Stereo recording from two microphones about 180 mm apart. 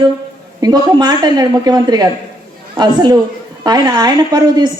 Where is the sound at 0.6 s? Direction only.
20° right (ahead or behind).